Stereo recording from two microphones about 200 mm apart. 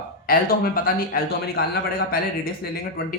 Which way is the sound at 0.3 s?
45° left (ahead or behind).